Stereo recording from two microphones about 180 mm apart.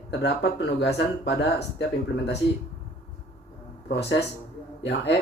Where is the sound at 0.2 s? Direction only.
65° left (ahead or behind).